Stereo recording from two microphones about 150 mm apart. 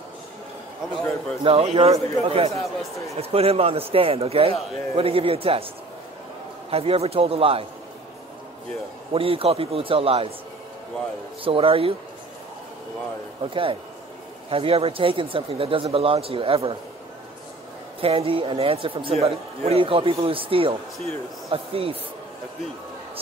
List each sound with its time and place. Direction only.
1.4 s speech: 40° right (ahead or behind)
2.5 s speech: centre (ahead or behind)
3.2 s speech: 40° right (ahead or behind)
6.7 s speech: 40° right (ahead or behind)
9.1 s speech: 40° right (ahead or behind)
11.4 s speech: 35° right (ahead or behind)
13.4 s speech: 35° right (ahead or behind)
18.0 s speech: 40° right (ahead or behind)